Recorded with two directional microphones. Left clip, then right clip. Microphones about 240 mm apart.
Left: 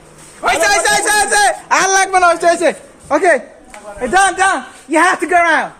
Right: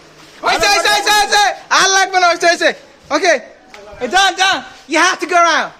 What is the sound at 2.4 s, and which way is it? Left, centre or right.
Speech, right.